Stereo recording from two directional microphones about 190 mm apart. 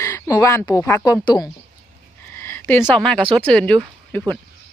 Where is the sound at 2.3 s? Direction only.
10° left (ahead or behind).